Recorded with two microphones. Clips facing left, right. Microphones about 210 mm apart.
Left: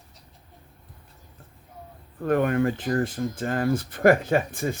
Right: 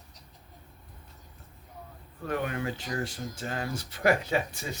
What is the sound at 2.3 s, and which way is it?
Speech, 50° left (ahead or behind).